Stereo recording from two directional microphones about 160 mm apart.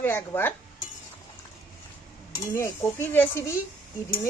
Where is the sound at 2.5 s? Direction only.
15° left (ahead or behind).